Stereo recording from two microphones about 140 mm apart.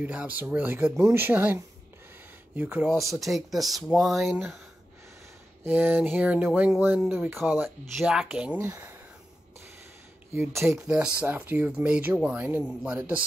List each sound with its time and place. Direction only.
0.0 s speech: 10° right (ahead or behind)
5.6 s speech: 10° right (ahead or behind)
8.5 s speech: 20° right (ahead or behind)
10.3 s speech: 15° right (ahead or behind)